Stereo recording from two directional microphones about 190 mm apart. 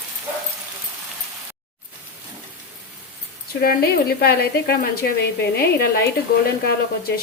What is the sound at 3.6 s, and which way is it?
Speech, 55° left (ahead or behind).